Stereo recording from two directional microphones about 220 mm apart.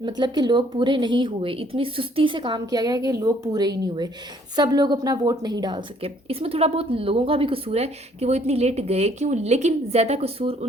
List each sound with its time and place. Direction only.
0.0 s a woman's voice: 20° right (ahead or behind)